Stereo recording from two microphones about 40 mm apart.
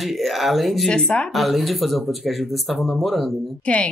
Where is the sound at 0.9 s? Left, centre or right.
Left.